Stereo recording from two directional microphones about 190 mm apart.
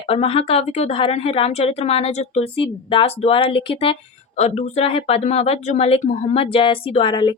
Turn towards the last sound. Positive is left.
turn(degrees=25)  # may be behind; listen again after turning